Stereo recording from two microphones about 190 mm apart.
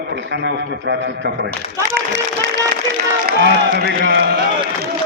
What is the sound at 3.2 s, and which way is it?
A man's voice, 55° right (ahead or behind).